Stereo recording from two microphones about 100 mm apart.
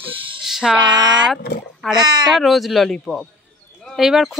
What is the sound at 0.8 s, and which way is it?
Music, 50° right (ahead or behind).